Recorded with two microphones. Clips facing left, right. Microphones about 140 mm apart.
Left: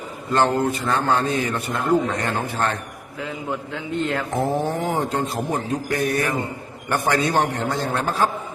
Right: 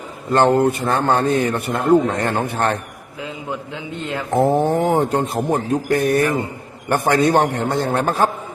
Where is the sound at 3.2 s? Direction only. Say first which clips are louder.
Even; 20° right (ahead or behind).